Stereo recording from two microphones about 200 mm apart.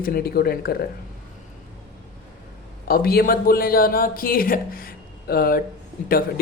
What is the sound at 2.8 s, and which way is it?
A man's voice, 50° left (ahead or behind).